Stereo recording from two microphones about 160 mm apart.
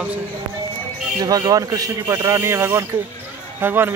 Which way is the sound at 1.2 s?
25° right (ahead or behind).